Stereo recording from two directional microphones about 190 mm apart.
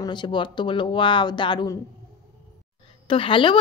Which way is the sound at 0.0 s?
25° left (ahead or behind).